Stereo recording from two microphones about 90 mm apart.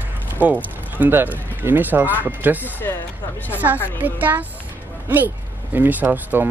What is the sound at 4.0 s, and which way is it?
Speech, 20° right (ahead or behind).